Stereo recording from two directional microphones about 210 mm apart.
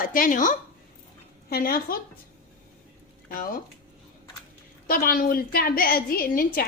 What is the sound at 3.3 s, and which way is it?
Speech, 45° left (ahead or behind).